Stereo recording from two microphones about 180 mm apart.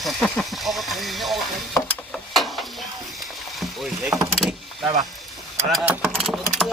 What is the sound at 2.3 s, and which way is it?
Mechanisms, centre (ahead or behind).